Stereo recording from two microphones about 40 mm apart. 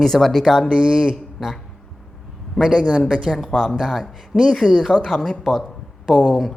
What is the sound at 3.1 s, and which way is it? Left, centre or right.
Speech, centre.